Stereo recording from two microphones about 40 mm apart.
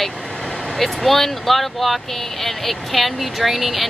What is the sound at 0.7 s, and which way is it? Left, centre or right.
Speech, centre.